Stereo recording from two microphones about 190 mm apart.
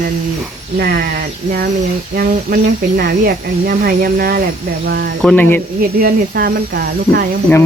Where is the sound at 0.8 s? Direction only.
55° right (ahead or behind).